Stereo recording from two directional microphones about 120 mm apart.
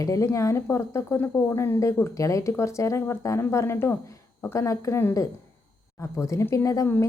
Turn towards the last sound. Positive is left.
turn(degrees=25)  # may be behind; listen again after turning